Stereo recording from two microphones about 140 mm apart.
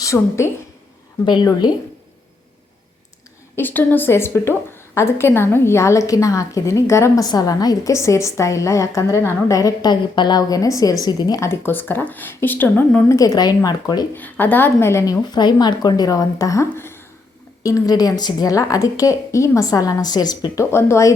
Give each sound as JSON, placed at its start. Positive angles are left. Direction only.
{"t": 0.0, "sound": "a woman's voice", "side_deg": 20}
{"t": 1.2, "sound": "a woman's voice", "side_deg": 30}
{"t": 3.5, "sound": "a woman's voice", "side_deg": 15}
{"t": 13.1, "sound": "a woman's voice", "side_deg": 25}
{"t": 14.1, "sound": "a woman's voice", "side_deg": 15}